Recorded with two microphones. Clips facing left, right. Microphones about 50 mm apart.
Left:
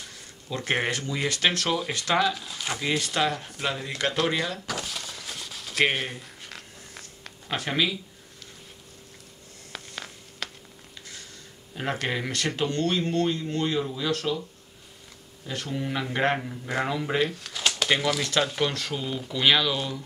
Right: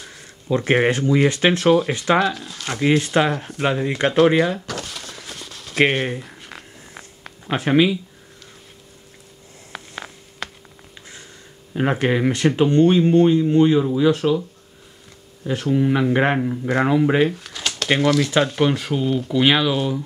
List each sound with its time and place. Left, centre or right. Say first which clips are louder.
0.0 s speech: right 4 dB; right
2.3 s speech: right 3 dB; centre
3.0 s speech: right 7 dB; right
4.6 s a sound: right 2 dB; centre
5.9 s speech: right 7 dB; centre
7.4 s speech: right 9 dB; right
9.7 s a sound: right 5 dB; centre
11.7 s speech: right 9 dB; right
15.4 s speech: right 12 dB; centre
17.3 s a sound: right 1 dB; centre
17.8 s speech: right 9 dB; centre